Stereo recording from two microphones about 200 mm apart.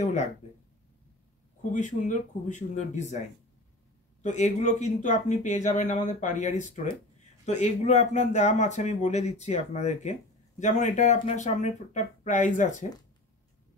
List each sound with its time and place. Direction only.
0.0 s speech: 35° left (ahead or behind)
1.6 s speech: 40° left (ahead or behind)
4.2 s speech: 35° left (ahead or behind)